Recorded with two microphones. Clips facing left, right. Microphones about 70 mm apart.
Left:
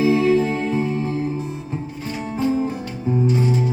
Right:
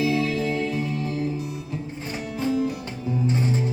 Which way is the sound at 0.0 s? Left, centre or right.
Left.